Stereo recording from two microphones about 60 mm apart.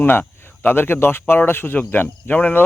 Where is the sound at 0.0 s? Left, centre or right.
Left.